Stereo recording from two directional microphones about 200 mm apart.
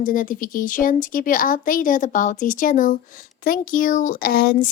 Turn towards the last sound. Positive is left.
turn(degrees=45)  # may be behind; listen again after turning